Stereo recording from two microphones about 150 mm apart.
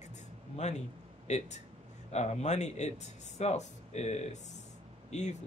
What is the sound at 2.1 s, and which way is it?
Speech, 50° left (ahead or behind).